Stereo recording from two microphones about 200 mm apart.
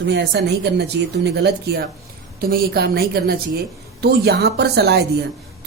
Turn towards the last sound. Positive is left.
turn(degrees=-55)  # may be behind; listen again after turning